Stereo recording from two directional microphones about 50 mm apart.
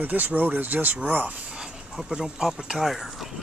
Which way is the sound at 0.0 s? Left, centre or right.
Right.